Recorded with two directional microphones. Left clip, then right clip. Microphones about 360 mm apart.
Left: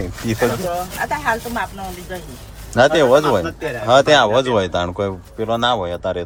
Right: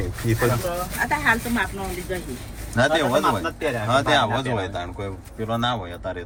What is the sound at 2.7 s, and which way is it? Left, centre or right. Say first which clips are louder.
A man's voice: left 7 dB; centre.